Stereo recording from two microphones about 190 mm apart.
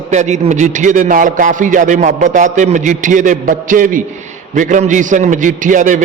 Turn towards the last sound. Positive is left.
turn(degrees=-40)  # may be behind; listen again after turning